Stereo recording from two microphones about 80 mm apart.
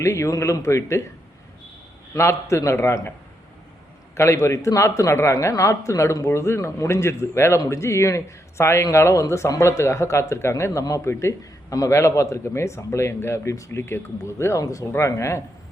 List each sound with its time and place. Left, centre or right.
0.0 s a man's voice: left
2.1 s a man's voice: left
4.1 s a man's voice: left